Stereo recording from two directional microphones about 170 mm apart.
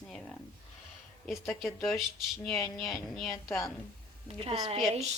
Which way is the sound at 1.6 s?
Centre (ahead or behind).